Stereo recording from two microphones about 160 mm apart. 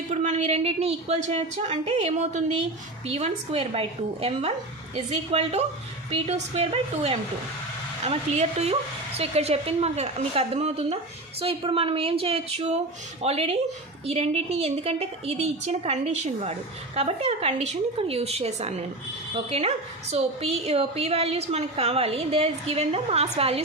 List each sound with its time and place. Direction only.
0.1 s a woman's voice: 50° right (ahead or behind)